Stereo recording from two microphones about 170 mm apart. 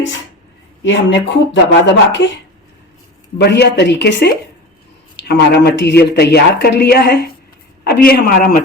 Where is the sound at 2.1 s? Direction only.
90° left.